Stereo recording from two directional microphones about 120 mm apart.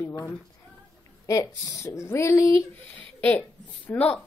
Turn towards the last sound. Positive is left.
turn(degrees=10)  # may be behind; listen again after turning